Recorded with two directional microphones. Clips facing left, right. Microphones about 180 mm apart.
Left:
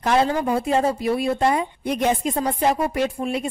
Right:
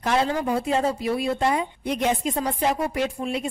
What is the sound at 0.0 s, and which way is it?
Speech, 45° left (ahead or behind).